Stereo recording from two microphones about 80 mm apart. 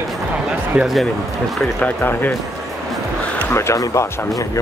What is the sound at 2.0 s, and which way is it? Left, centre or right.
Speech, left.